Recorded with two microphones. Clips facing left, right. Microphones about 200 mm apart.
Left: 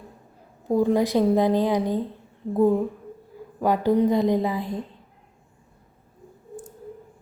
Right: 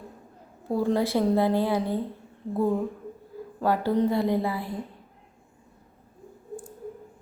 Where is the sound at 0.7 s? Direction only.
15° left (ahead or behind).